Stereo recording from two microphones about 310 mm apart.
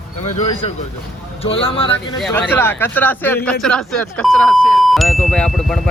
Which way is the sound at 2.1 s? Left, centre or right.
Centre.